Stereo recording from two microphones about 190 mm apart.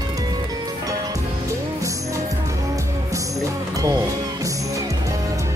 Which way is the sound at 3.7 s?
15° right (ahead or behind).